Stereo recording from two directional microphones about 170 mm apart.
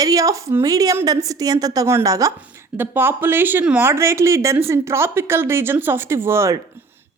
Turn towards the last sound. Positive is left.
turn(degrees=-15)  # may be behind; listen again after turning